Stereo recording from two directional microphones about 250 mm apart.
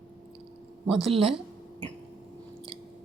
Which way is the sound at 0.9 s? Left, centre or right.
Right.